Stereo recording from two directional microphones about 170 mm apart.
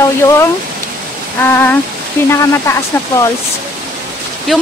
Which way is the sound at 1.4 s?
10° left (ahead or behind).